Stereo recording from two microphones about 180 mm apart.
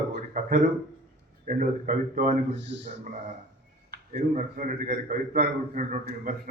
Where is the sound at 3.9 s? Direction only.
55° right (ahead or behind).